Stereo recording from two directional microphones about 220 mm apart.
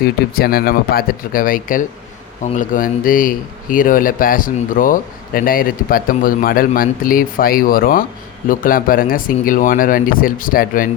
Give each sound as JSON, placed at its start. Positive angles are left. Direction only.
{"t": 0.0, "sound": "speech", "side_deg": 45}